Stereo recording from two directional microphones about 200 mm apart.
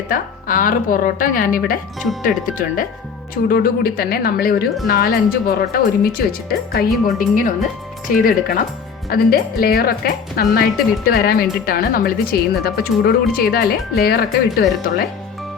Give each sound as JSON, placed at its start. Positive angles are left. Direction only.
{"t": 0.1, "sound": "a woman's voice", "side_deg": 40}